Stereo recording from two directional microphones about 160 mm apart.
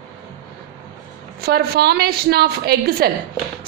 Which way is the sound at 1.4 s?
75° right (ahead or behind).